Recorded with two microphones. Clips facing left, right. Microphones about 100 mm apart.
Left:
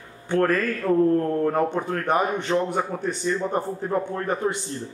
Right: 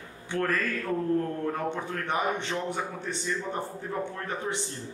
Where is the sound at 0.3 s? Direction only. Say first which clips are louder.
Left 7 dB; 50° left (ahead or behind).